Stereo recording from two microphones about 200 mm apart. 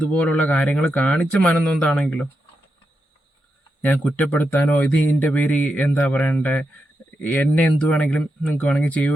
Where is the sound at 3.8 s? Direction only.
10° left (ahead or behind).